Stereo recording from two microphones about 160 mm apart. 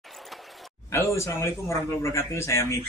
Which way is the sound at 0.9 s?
15° left (ahead or behind).